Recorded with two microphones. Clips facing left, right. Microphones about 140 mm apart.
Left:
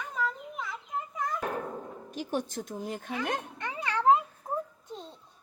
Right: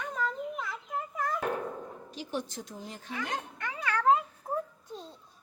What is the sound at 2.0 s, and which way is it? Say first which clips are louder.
Speech: left 4 dB; 50° left (ahead or behind).